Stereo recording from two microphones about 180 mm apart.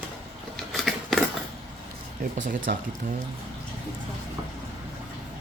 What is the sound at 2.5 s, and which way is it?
Speech, 50° right (ahead or behind).